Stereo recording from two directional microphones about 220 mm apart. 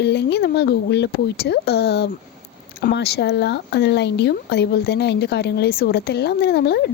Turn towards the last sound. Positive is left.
turn(degrees=50)  # may be behind; listen again after turning